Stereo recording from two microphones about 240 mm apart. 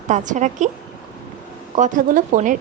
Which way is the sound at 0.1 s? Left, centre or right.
Right.